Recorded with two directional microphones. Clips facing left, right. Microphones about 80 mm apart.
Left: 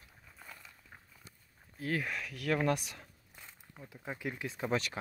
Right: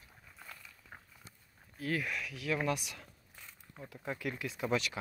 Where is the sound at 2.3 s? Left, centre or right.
Left.